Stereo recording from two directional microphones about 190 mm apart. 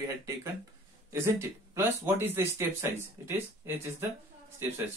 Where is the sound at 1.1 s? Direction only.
15° right (ahead or behind).